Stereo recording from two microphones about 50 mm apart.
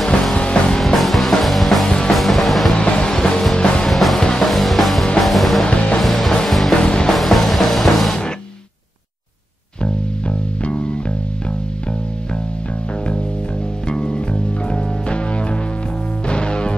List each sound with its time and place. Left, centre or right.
0.4 s music: left
0.7 s music: centre
1.9 s music: centre
2.1 s music: centre
2.7 s music: left
3.8 s music: centre
4.2 s music: centre
4.5 s music: centre
5.7 s music: left
5.9 s music: centre
6.8 s music: centre
7.2 s music: centre
13.8 s music: centre
16.3 s music: centre